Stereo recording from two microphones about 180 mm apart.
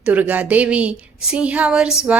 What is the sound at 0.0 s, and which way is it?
A woman's voice, 10° right (ahead or behind).